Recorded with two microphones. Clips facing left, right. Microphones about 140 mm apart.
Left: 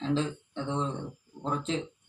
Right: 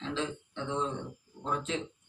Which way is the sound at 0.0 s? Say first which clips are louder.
Left 5 dB; 35° left (ahead or behind).